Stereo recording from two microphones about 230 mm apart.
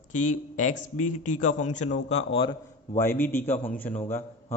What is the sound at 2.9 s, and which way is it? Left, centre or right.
A man's voice, centre.